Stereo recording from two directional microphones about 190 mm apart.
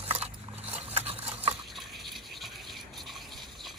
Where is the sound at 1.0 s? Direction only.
30° right (ahead or behind).